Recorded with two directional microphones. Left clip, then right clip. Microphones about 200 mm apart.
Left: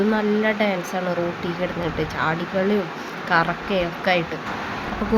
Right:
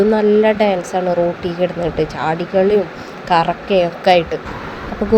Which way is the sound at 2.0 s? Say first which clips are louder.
Right 4 dB; 15° right (ahead or behind).